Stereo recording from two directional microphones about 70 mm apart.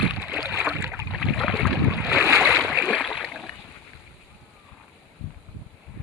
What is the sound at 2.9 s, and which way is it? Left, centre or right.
Splash, centre.